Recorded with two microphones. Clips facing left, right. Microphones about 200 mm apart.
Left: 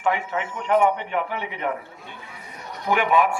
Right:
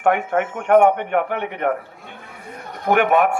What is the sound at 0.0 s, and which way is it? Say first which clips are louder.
A man's voice: right 6 dB; 55° right (ahead or behind).